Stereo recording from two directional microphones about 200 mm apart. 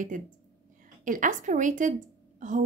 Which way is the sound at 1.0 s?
40° right (ahead or behind).